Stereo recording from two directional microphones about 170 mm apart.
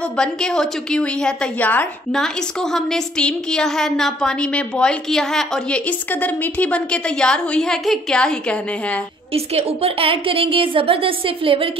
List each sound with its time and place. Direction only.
0.2 s a woman's voice: 5° left (ahead or behind)
9.3 s a woman's voice: 35° right (ahead or behind)